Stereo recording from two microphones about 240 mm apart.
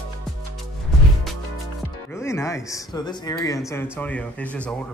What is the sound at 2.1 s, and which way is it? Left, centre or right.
Speech, centre.